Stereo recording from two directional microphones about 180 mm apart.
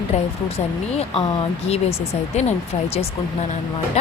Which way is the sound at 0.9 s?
35° left (ahead or behind).